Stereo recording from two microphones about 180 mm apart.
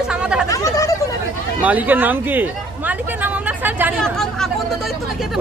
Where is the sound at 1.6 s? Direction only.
10° right (ahead or behind).